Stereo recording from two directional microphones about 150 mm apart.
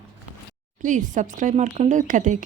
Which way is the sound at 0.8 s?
60° right (ahead or behind).